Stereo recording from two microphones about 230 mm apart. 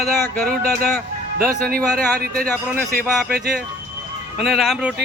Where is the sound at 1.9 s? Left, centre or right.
Centre.